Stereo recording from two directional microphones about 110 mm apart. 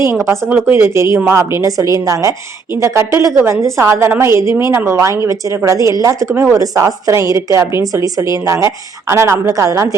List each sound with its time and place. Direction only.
0.0 s a woman's voice: 25° right (ahead or behind)